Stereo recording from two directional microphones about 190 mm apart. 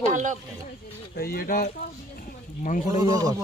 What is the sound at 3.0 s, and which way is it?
Speech, 20° right (ahead or behind).